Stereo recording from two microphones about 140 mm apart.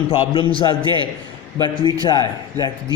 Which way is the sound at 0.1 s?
40° left (ahead or behind).